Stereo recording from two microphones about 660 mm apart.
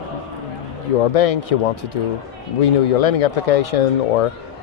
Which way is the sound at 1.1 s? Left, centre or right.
Left.